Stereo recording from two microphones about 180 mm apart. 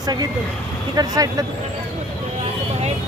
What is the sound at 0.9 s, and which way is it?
Speech, 20° right (ahead or behind).